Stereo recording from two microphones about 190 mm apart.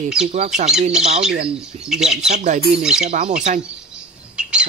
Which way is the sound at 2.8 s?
5° right (ahead or behind).